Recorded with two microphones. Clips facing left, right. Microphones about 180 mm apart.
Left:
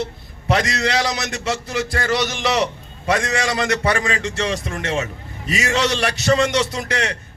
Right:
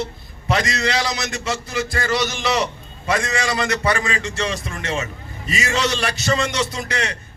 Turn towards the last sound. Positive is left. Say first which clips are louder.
# left 2 dB
turn(degrees=70)  # may be behind; listen again after turning